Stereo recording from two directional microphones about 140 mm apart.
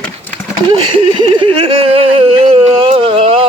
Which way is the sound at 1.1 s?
35° right (ahead or behind).